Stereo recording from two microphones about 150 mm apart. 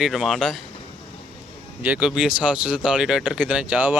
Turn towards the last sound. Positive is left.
turn(degrees=-10)  # may be behind; listen again after turning